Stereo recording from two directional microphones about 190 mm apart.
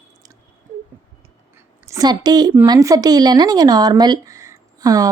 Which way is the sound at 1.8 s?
20° right (ahead or behind).